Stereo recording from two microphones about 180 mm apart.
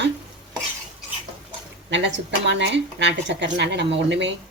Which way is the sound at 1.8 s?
85° right.